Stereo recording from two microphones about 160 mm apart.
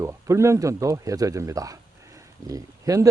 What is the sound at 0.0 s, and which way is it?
Speech, 20° right (ahead or behind).